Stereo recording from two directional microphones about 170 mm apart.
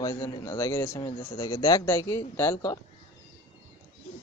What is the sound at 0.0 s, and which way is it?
A man's voice, 20° left (ahead or behind).